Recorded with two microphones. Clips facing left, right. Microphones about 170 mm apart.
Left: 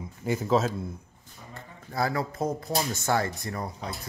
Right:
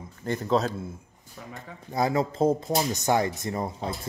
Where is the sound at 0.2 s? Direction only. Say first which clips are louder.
Even; 5° left (ahead or behind).